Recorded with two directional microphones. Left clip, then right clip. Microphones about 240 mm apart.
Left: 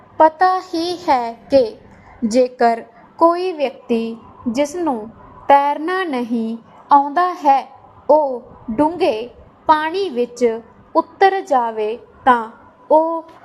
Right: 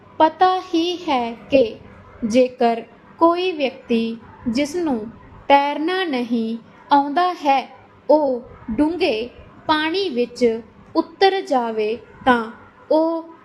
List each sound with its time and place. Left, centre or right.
0.2 s speech: left
2.3 s a woman's voice: left